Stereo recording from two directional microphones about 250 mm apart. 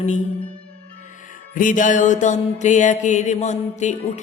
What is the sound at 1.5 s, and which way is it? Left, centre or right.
Mantra, left.